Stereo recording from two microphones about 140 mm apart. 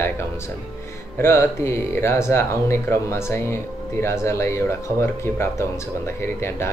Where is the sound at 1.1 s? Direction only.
15° left (ahead or behind).